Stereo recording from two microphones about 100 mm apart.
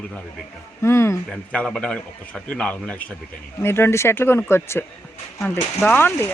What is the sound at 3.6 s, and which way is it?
Speech, 25° left (ahead or behind).